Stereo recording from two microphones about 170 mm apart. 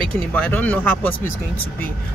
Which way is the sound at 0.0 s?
10° left (ahead or behind).